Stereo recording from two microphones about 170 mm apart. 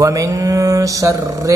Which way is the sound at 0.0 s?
20° right (ahead or behind).